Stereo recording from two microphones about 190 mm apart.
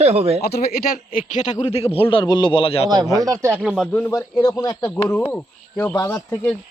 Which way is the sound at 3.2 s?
20° right (ahead or behind).